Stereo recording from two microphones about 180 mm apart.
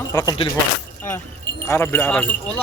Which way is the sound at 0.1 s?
20° left (ahead or behind).